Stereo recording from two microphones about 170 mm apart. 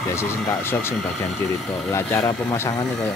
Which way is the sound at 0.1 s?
15° left (ahead or behind).